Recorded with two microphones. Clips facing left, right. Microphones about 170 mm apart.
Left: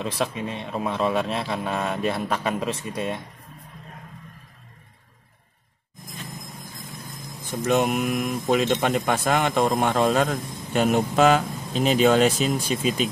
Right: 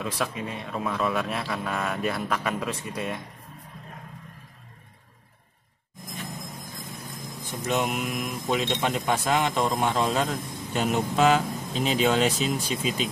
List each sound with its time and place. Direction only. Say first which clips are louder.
0.0 s a man's voice: left 3 dB; 25° left (ahead or behind)
7.6 s speech: left 5 dB; 50° left (ahead or behind)